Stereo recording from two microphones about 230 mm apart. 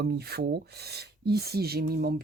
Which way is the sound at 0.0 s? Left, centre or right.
Right.